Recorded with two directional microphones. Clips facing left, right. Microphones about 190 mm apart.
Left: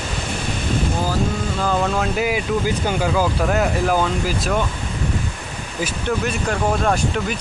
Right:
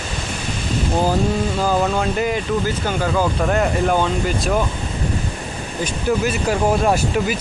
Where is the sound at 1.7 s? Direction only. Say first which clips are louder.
Even; centre (ahead or behind).